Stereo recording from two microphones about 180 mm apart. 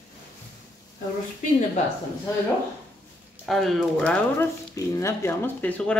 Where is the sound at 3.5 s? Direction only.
Centre (ahead or behind).